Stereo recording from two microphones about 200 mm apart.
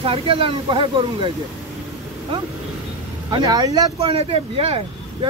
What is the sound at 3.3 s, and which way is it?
Speech, 20° right (ahead or behind).